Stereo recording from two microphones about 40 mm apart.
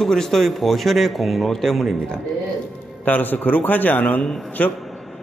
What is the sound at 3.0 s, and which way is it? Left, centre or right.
A man's voice, left.